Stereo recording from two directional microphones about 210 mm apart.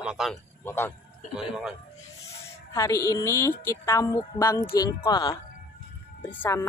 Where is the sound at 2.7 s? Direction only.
15° left (ahead or behind).